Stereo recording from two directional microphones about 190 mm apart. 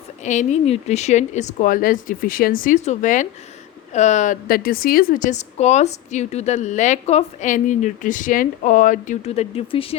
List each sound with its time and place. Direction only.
0.3 s a woman's voice: 35° left (ahead or behind)